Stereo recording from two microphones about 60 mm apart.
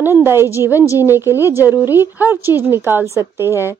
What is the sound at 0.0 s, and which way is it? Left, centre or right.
A woman's voice, right.